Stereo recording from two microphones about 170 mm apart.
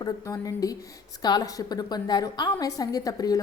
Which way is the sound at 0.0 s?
20° left (ahead or behind).